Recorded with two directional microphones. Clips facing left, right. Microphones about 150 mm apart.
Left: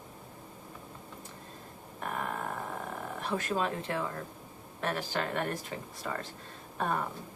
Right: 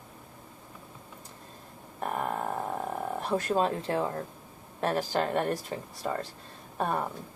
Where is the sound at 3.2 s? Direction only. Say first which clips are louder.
Right 4 dB; 35° right (ahead or behind).